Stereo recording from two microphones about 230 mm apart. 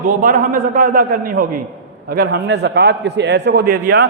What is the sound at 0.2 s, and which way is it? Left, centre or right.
A man's voice, right.